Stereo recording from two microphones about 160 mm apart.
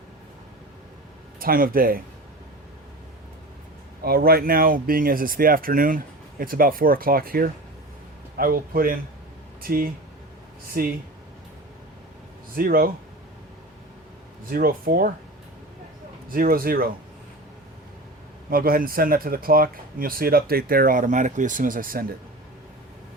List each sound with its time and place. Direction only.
1.4 s speech: 65° right (ahead or behind)
4.0 s speech: 70° right (ahead or behind)
12.5 s speech: 65° right (ahead or behind)
14.5 s speech: 65° right (ahead or behind)
16.3 s speech: 65° right (ahead or behind)
18.5 s speech: 65° right (ahead or behind)